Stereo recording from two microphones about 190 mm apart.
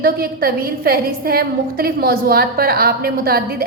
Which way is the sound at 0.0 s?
50° right (ahead or behind).